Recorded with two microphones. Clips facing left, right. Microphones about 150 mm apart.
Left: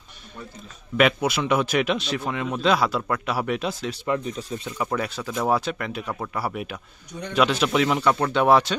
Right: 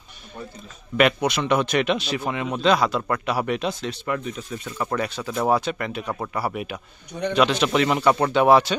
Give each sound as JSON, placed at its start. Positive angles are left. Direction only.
{"t": 0.9, "sound": "speech", "side_deg": 0}
{"t": 4.2, "sound": "speech", "side_deg": 35}
{"t": 4.6, "sound": "speech", "side_deg": 0}
{"t": 7.1, "sound": "a man's voice", "side_deg": -70}
{"t": 7.3, "sound": "speech", "side_deg": 0}